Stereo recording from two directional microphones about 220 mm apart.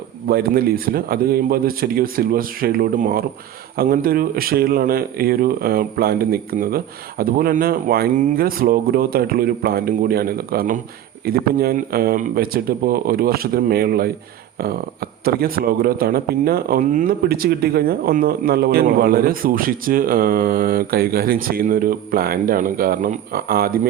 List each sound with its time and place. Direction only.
0.3 s speech: 45° right (ahead or behind)